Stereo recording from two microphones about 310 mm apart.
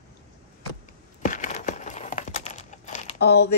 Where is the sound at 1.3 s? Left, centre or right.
Left.